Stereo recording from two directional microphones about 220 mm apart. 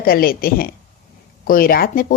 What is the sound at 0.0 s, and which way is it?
A woman's voice, 40° left (ahead or behind).